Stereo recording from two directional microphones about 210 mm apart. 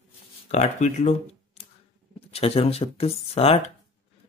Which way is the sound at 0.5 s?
35° left (ahead or behind).